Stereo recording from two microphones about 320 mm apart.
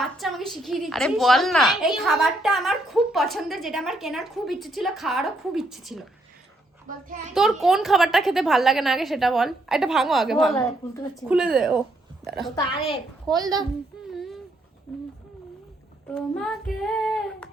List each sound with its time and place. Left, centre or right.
0.0 s a woman's voice: centre
6.8 s a child's voice: right
7.3 s a woman's voice: centre
12.2 s a woman's voice: centre
14.1 s a sound: centre
14.9 s hoot: centre
16.1 s child singing: centre